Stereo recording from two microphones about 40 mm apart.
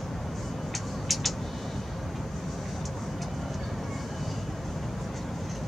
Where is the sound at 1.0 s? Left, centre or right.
Centre.